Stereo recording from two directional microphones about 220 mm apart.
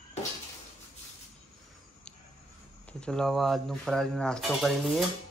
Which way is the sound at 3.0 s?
Centre (ahead or behind).